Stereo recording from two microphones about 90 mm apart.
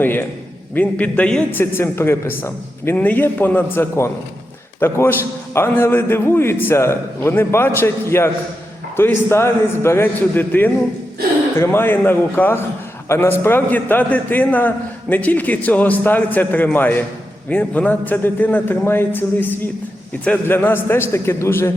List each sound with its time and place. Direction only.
0.0 s a man's voice: 25° left (ahead or behind)
1.5 s a man's voice: 25° left (ahead or behind)